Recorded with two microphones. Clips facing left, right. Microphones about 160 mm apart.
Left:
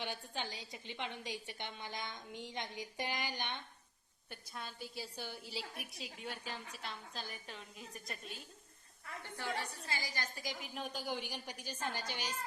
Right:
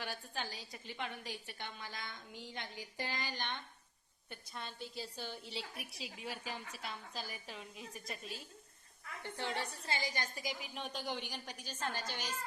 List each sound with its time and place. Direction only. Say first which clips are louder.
0.0 s a woman's voice: left 1 dB; 20° left (ahead or behind)
4.3 s a woman's voice: even; 5° left (ahead or behind)
5.5 s a woman's voice: even; centre (ahead or behind)
9.4 s a woman's voice: right 1 dB; 25° right (ahead or behind)
10.6 s a woman's voice: even; centre (ahead or behind)